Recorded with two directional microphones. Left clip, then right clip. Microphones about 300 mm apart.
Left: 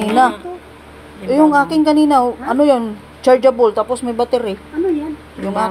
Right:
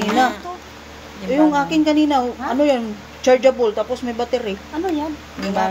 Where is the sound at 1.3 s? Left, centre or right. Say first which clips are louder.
Left 4 dB; centre.